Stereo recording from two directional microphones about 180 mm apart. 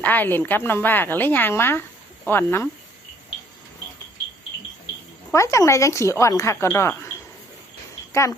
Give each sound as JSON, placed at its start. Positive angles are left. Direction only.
{"t": 0.0, "sound": "speech", "side_deg": 10}
{"t": 5.3, "sound": "speech", "side_deg": 15}